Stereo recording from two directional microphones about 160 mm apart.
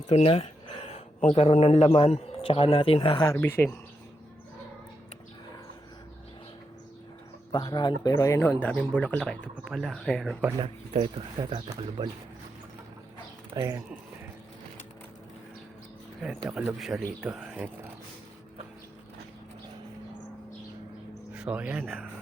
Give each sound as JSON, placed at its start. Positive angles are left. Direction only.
{"t": 0.1, "sound": "speech", "side_deg": 40}
{"t": 3.3, "sound": "speech", "side_deg": 15}
{"t": 7.5, "sound": "speech", "side_deg": 25}
{"t": 11.0, "sound": "speech", "side_deg": -30}
{"t": 13.6, "sound": "speech", "side_deg": -20}
{"t": 16.5, "sound": "speech", "side_deg": -5}
{"t": 21.3, "sound": "speech", "side_deg": -5}